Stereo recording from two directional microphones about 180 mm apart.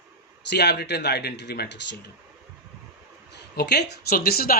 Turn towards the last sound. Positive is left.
turn(degrees=55)  # may be behind; listen again after turning